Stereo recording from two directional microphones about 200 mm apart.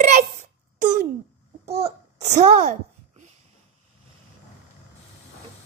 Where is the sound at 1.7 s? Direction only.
30° right (ahead or behind).